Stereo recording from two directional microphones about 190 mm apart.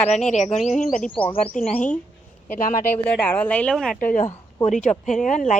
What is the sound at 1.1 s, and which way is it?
Speech, 25° left (ahead or behind).